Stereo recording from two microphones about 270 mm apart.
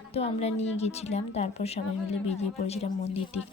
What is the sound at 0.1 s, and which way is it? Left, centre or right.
A woman's voice, left.